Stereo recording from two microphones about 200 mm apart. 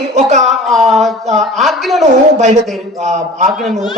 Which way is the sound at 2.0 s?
35° right (ahead or behind).